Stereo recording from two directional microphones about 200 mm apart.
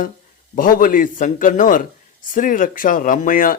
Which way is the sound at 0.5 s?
45° left (ahead or behind).